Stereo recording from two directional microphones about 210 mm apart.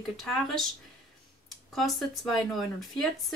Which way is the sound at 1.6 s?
Centre (ahead or behind).